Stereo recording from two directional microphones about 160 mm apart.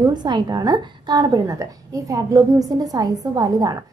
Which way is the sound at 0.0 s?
25° right (ahead or behind).